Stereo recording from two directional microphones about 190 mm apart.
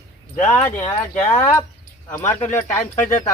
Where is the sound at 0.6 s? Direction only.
35° left (ahead or behind).